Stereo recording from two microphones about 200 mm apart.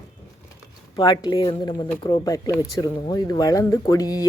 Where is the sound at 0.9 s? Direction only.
20° left (ahead or behind).